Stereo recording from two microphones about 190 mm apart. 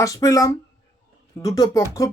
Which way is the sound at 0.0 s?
15° left (ahead or behind).